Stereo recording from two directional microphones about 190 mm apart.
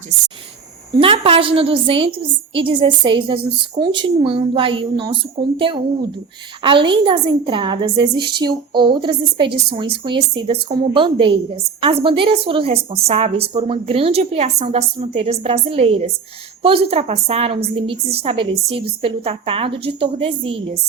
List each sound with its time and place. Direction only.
0.9 s a woman's voice: 30° right (ahead or behind)